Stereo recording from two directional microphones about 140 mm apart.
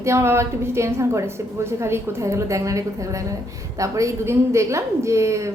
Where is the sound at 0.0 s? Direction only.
20° right (ahead or behind).